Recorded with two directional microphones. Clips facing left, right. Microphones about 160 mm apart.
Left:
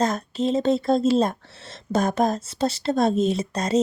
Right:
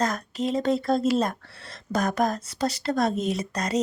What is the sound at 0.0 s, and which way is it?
Speech, 25° left (ahead or behind).